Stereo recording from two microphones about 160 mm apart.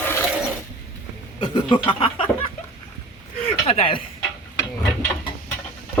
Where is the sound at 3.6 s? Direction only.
35° left (ahead or behind).